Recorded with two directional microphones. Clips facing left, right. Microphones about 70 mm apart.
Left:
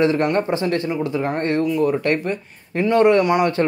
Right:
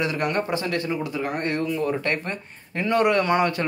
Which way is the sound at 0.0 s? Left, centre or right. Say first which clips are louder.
Left 7 dB; left.